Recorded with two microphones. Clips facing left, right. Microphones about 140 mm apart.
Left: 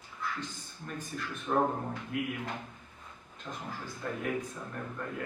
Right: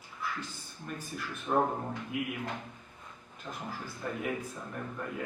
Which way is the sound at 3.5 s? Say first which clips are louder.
Even; 5° right (ahead or behind).